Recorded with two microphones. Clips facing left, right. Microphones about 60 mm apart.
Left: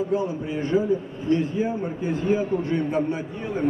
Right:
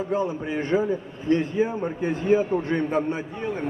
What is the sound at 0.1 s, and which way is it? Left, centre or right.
A man's voice, right.